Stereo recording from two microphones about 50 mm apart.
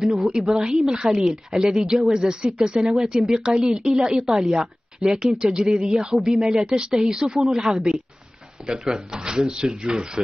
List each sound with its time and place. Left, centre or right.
0.1 s speech: centre